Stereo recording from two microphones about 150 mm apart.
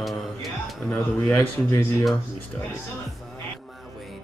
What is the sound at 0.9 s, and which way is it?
Speech, 15° left (ahead or behind).